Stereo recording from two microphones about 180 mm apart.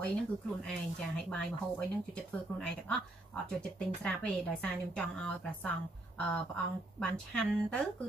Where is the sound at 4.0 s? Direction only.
5° left (ahead or behind).